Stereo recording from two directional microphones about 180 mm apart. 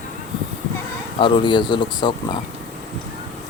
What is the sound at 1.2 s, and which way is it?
Speech, 25° left (ahead or behind).